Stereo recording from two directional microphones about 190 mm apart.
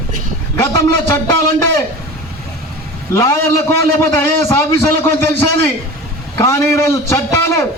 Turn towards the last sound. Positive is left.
turn(degrees=15)  # may be behind; listen again after turning